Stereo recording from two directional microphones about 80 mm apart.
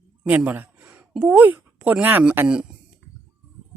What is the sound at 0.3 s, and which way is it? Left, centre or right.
Speech, right.